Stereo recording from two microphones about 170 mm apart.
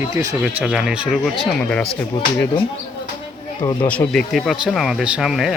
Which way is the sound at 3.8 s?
10° left (ahead or behind).